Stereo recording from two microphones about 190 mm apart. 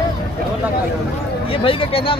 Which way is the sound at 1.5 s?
30° left (ahead or behind).